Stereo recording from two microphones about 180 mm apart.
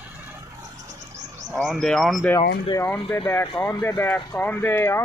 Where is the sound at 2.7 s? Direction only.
20° left (ahead or behind).